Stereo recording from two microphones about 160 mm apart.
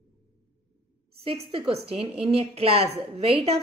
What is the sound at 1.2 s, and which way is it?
A woman's voice, 35° right (ahead or behind).